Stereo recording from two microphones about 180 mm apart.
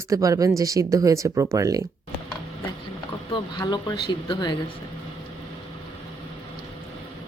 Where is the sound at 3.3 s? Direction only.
25° left (ahead or behind).